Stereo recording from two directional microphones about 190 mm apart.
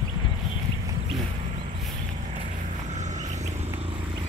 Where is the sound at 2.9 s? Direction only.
40° right (ahead or behind).